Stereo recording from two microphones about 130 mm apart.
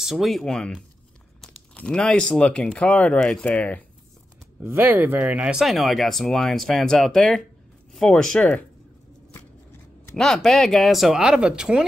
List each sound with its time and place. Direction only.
0.0 s speech: centre (ahead or behind)
4.6 s speech: 15° right (ahead or behind); by 8.6 s 10° left (ahead or behind)
10.1 s speech: 5° left (ahead or behind)